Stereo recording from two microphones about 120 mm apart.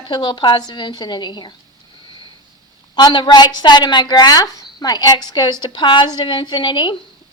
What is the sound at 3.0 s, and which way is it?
A woman's voice, 35° left (ahead or behind).